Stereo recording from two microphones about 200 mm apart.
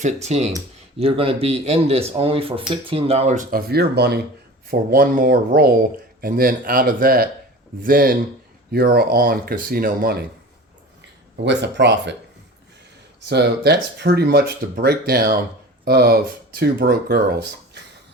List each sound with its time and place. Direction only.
0.0 s speech: 35° right (ahead or behind); by 10.2 s 50° right (ahead or behind)
11.4 s speech: 60° right (ahead or behind)
13.2 s speech: 55° right (ahead or behind)